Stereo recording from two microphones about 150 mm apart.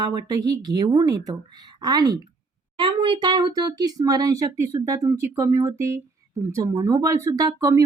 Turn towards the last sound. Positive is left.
turn(degrees=-25)  # may be behind; listen again after turning